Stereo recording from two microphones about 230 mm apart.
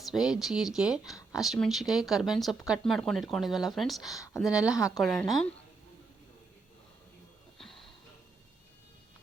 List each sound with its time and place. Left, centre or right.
0.0 s speech: centre